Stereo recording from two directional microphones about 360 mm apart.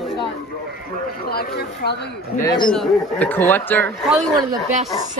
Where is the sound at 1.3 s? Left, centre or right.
Left.